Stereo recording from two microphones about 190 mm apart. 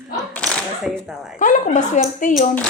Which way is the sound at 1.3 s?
40° left (ahead or behind).